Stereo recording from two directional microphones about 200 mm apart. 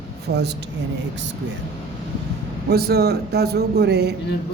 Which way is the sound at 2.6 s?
50° right (ahead or behind).